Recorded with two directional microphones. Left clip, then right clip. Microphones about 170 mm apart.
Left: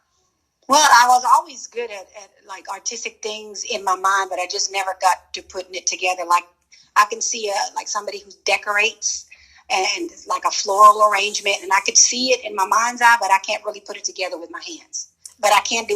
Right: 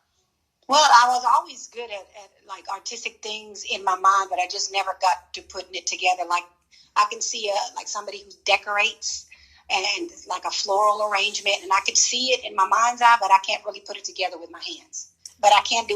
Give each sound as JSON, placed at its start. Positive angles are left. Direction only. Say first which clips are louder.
{"t": 0.7, "sound": "a woman's voice", "louder": "left 3 dB", "side_deg": 35}